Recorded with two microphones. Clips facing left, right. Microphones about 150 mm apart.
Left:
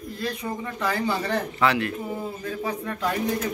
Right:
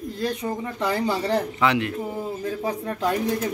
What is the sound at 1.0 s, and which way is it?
Speech, 35° right (ahead or behind).